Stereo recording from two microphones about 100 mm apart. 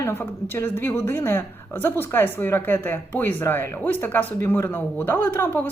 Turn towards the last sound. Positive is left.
turn(degrees=20)  # may be behind; listen again after turning